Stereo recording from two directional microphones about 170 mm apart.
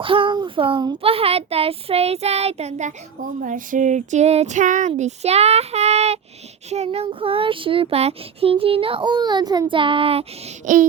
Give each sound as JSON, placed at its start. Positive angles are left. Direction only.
{"t": 0.0, "sound": "speech", "side_deg": -30}
{"t": 3.4, "sound": "child singing", "side_deg": -50}
{"t": 6.7, "sound": "speech", "side_deg": -40}